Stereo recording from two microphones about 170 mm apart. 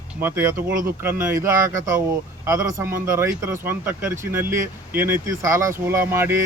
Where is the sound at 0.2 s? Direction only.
10° right (ahead or behind).